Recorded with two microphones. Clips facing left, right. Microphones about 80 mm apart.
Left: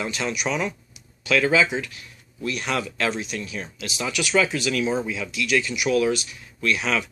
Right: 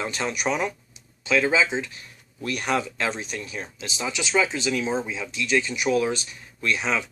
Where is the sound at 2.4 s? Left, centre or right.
Right.